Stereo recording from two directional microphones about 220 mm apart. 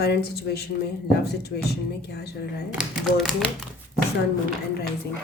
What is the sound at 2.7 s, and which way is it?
Speech, 5° right (ahead or behind).